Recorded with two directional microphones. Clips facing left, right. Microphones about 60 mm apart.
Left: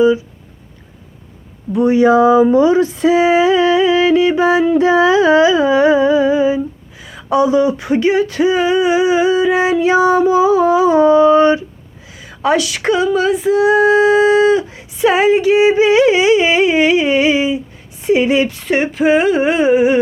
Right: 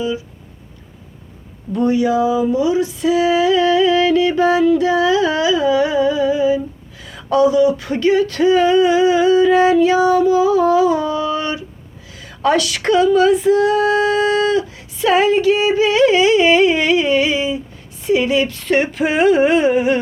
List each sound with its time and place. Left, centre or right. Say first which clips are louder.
2.0 s speech: left 6 dB; left
7.0 s a sound: left 2 dB; centre
7.3 s speech: even; left
12.1 s carnatic music: left 1 dB; centre
18.0 s speech: left 3 dB; left
18.5 s a sound: even; centre